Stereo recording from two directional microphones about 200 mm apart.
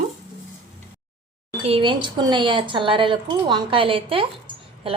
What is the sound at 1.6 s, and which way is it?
Speech, 25° right (ahead or behind).